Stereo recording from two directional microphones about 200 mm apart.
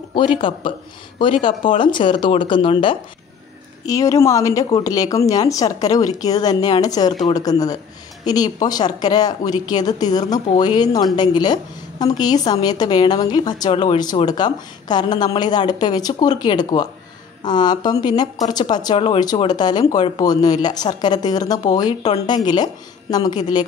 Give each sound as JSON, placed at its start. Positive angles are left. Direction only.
{"t": 0.1, "sound": "a woman's voice", "side_deg": 25}